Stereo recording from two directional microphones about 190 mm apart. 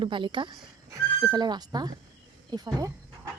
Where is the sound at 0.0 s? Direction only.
25° right (ahead or behind).